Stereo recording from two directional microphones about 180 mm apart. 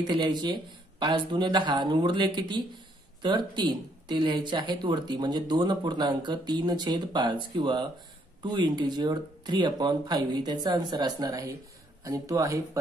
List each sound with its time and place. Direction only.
0.0 s speech: 25° right (ahead or behind)